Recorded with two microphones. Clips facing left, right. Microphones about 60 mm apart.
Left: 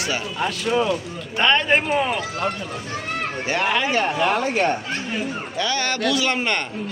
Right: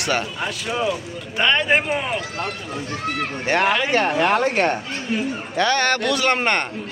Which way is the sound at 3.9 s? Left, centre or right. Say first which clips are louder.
Right 2 dB; right.